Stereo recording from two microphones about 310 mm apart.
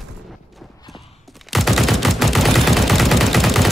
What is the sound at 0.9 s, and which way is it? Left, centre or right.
Gunshot, centre.